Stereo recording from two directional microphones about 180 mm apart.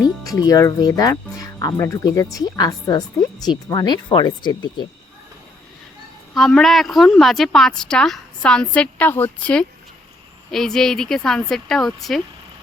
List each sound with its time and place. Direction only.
0.0 s speech: 20° left (ahead or behind)
6.3 s a woman's voice: centre (ahead or behind)